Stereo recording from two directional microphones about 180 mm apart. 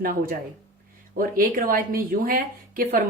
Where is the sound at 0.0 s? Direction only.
55° right (ahead or behind).